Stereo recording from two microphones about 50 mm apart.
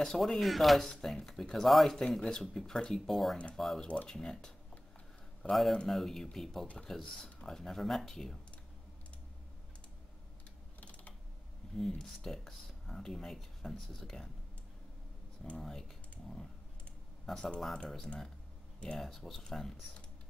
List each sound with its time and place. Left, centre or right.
0.0 s speech: centre
3.8 s speech: left
4.1 s speech: centre
10.8 s typing: left
11.7 s speech: centre
15.5 s speech: centre
17.3 s speech: centre
18.0 s speech: centre